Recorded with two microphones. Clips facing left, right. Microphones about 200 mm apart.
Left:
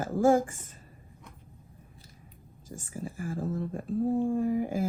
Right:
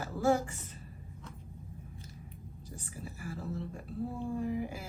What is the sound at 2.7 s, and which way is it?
Speech, 45° left (ahead or behind).